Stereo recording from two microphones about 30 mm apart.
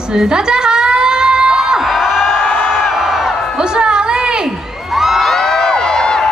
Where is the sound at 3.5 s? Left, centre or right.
Right.